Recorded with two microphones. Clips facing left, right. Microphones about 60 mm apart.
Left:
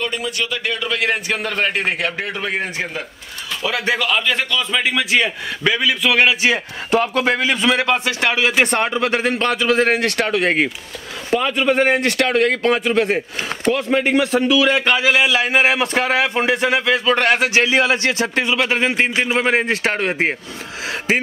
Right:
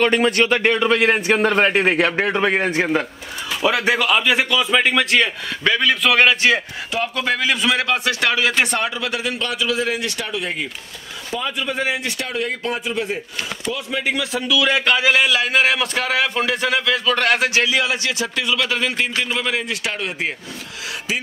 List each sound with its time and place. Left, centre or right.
0.0 s a man's voice: right
2.1 s a man's voice: right
2.8 s speech: right
3.6 s speech: centre
4.8 s a man's voice: centre
6.9 s a man's voice: left
7.2 s a man's voice: left
8.6 s a man's voice: left
14.9 s a man's voice: centre; by 21.2 s left